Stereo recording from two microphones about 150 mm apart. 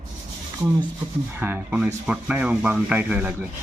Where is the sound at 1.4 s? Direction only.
10° right (ahead or behind).